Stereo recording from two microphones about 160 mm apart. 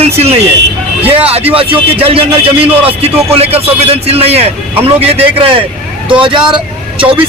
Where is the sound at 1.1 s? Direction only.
40° right (ahead or behind).